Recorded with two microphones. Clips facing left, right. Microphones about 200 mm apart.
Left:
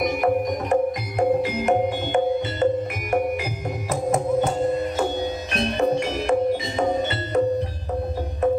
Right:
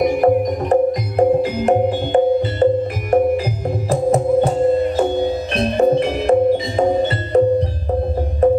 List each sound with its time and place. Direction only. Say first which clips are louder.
0.2 s music: right 6 dB; 35° right (ahead or behind)